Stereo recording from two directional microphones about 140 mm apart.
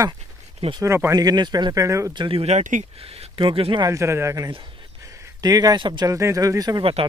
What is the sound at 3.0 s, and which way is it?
Speech, 45° right (ahead or behind).